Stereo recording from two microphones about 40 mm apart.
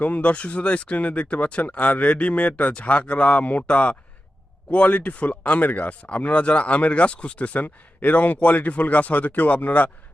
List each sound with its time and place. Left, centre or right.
0.0 s speech: left
7.6 s speech: left